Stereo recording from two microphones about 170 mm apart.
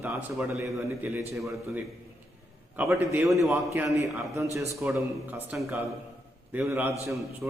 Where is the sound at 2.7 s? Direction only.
15° right (ahead or behind).